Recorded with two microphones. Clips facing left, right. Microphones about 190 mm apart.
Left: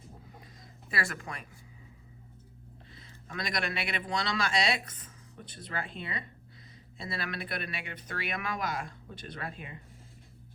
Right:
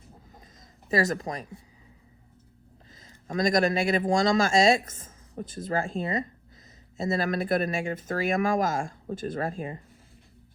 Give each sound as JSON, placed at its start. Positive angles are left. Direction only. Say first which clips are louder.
{"t": 0.9, "sound": "speech", "louder": "right 10 dB", "side_deg": -40}
{"t": 2.9, "sound": "speech", "louder": "right 11 dB", "side_deg": -45}